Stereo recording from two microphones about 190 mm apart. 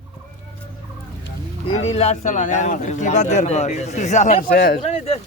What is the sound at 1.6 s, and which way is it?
Speech, 30° left (ahead or behind).